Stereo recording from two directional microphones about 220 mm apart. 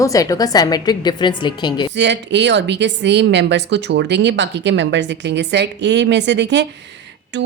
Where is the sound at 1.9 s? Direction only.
50° right (ahead or behind).